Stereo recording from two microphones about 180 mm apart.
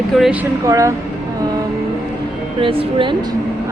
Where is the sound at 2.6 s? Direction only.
30° right (ahead or behind).